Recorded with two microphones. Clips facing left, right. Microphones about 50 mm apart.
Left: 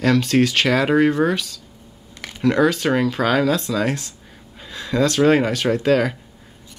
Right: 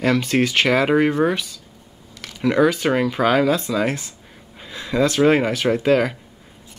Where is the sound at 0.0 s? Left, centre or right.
Centre.